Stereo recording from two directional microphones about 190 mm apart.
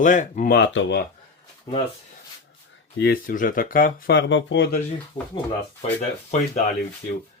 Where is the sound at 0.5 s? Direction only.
75° left (ahead or behind).